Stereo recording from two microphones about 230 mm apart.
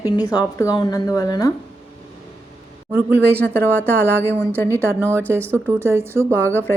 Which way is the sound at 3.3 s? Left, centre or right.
Centre.